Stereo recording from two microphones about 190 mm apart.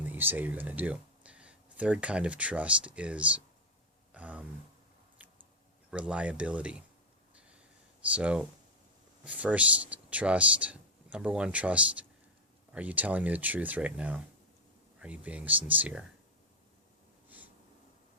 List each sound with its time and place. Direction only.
0.0 s speech: 10° right (ahead or behind)
4.1 s a sound: 5° right (ahead or behind)
5.9 s speech: 5° right (ahead or behind)
7.3 s a sound: 5° right (ahead or behind)
8.1 s speech: 5° right (ahead or behind)
17.2 s snort: 10° right (ahead or behind)